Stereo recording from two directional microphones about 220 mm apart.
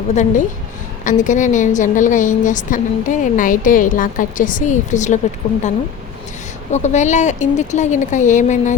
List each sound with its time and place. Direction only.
0.1 s a woman's voice: 35° left (ahead or behind)
6.7 s a woman's voice: 30° left (ahead or behind)